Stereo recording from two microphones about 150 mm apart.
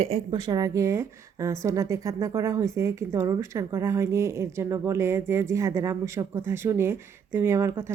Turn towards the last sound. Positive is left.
turn(degrees=-20)  # may be behind; listen again after turning